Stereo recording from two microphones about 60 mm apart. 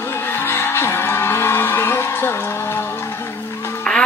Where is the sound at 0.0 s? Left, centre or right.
Left.